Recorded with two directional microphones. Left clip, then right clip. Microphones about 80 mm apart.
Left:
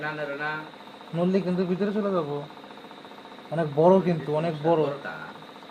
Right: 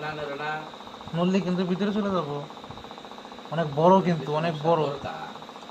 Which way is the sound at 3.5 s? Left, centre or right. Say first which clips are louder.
Even; centre.